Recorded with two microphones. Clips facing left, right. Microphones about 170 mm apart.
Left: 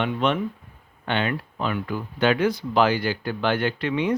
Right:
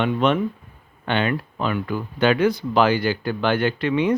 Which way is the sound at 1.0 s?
60° right (ahead or behind).